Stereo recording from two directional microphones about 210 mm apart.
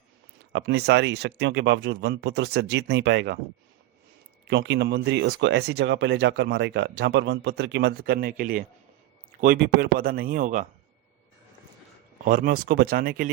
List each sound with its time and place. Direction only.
0.5 s speech: 50° right (ahead or behind)
4.4 s speech: 55° right (ahead or behind); by 10.7 s 40° right (ahead or behind)
12.2 s speech: 40° right (ahead or behind)